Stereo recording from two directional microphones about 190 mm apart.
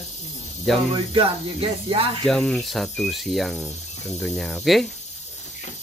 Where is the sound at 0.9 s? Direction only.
30° right (ahead or behind).